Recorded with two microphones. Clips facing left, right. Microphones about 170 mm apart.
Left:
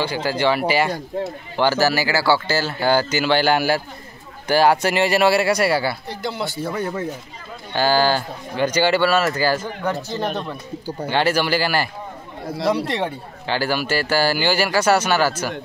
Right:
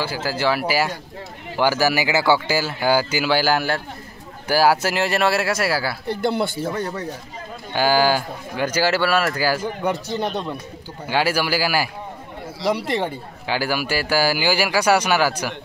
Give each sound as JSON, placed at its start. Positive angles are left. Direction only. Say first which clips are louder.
{"t": 0.0, "sound": "speech", "louder": "left 2 dB", "side_deg": -5}
{"t": 6.0, "sound": "speech", "louder": "right 5 dB", "side_deg": -55}
{"t": 6.8, "sound": "speech", "louder": "left 2 dB", "side_deg": 5}
{"t": 7.7, "sound": "speech", "louder": "even", "side_deg": -10}